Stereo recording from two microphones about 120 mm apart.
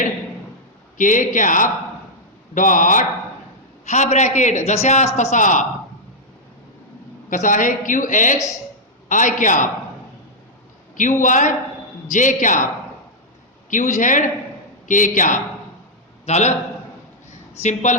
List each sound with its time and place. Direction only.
0.9 s a woman's voice: 90° left
3.8 s a man's voice: 75° left (ahead or behind)
5.1 s a woman's voice: 85° left
7.3 s a woman's voice: 90° left
11.2 s a woman's voice: 90° left
13.7 s a woman's voice: 90° left
16.2 s a man's voice: 70° left (ahead or behind)
17.6 s a man's voice: 75° left (ahead or behind)